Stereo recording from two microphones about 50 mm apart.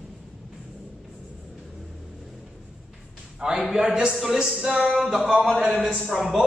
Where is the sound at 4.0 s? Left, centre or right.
Centre.